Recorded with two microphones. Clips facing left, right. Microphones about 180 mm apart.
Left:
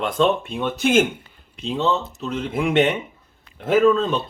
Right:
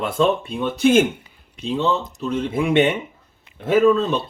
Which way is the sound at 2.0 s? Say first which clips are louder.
Right 3 dB; 15° right (ahead or behind).